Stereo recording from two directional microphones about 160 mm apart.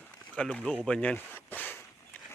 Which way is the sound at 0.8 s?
5° left (ahead or behind).